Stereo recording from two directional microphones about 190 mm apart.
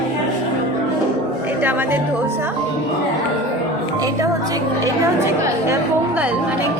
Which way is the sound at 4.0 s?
20° right (ahead or behind).